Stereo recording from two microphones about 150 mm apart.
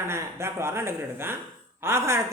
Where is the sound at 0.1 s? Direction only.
15° right (ahead or behind).